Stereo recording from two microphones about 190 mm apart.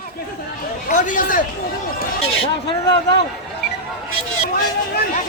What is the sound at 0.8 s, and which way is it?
Speech, 45° left (ahead or behind).